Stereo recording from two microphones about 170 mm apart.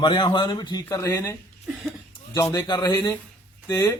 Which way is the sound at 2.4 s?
20° left (ahead or behind).